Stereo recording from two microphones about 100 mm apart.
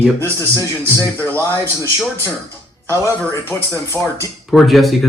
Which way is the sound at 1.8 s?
25° left (ahead or behind).